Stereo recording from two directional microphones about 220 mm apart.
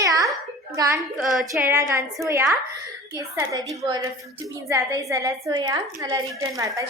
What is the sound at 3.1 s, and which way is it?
A woman's voice, 15° right (ahead or behind).